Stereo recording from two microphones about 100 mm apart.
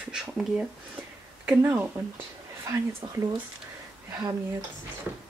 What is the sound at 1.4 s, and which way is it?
Speech, 20° right (ahead or behind).